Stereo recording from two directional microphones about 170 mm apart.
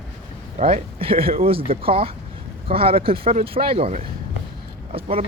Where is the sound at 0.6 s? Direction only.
35° right (ahead or behind).